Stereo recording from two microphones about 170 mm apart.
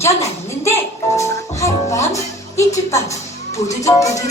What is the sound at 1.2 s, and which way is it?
Speech, 20° left (ahead or behind).